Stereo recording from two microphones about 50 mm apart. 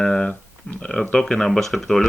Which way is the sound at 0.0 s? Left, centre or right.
Left.